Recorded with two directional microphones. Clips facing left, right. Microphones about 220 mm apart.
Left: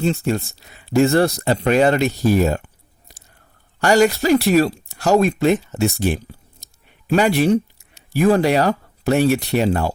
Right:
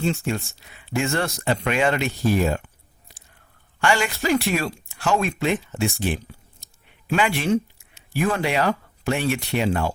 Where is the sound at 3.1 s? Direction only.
40° left (ahead or behind).